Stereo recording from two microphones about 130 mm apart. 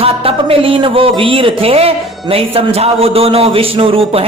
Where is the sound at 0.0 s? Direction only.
45° right (ahead or behind).